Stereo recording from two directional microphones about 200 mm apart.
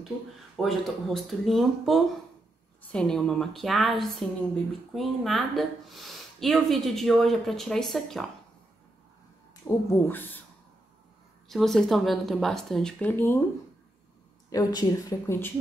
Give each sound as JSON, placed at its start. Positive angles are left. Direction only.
{"t": 0.6, "sound": "a woman's voice", "side_deg": 0}
{"t": 9.7, "sound": "speech", "side_deg": 10}
{"t": 11.4, "sound": "a woman's voice", "side_deg": 0}
{"t": 14.5, "sound": "speech", "side_deg": 20}